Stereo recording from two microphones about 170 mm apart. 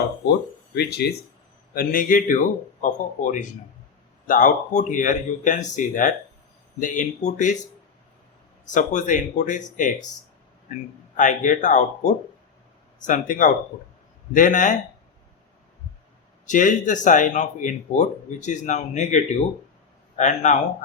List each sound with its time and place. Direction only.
0.2 s speech: 80° left
1.7 s speech: 55° left (ahead or behind)
8.7 s speech: 45° left (ahead or behind)
11.2 s speech: 50° left (ahead or behind)
16.5 s speech: 50° left (ahead or behind)